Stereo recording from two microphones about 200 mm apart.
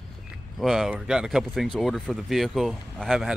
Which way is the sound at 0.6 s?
Centre (ahead or behind).